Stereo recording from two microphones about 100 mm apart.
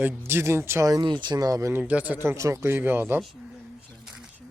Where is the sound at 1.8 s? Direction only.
15° right (ahead or behind).